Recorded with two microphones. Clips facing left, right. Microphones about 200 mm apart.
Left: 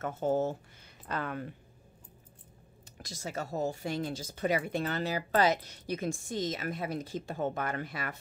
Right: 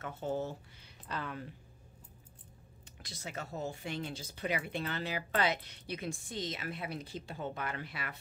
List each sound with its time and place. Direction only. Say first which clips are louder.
0.0 s a woman's voice: left 7 dB; 45° left (ahead or behind)
3.0 s a woman's voice: left 6 dB; 45° left (ahead or behind)